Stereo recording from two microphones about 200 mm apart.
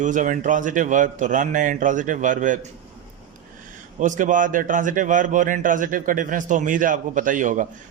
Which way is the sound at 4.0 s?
40° right (ahead or behind).